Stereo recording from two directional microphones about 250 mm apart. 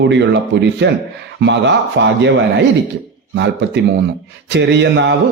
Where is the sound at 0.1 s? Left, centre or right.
Right.